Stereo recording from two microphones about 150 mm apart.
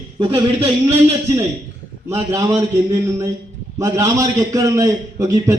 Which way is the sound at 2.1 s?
20° right (ahead or behind).